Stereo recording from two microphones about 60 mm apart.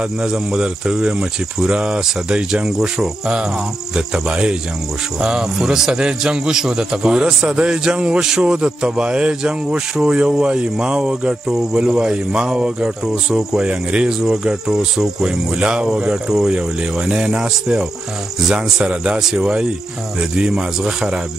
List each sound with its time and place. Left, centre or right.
0.2 s speech: centre